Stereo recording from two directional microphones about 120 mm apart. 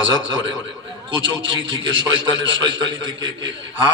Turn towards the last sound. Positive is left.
turn(degrees=-40)  # may be behind; listen again after turning